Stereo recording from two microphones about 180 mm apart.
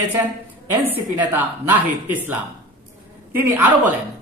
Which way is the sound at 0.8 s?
10° right (ahead or behind).